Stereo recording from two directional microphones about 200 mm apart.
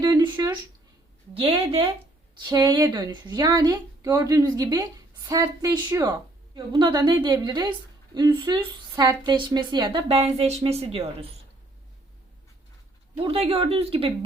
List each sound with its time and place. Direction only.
0.0 s a sound: 20° right (ahead or behind)
1.3 s a woman's voice: 30° right (ahead or behind)
13.1 s a woman's voice: 30° right (ahead or behind)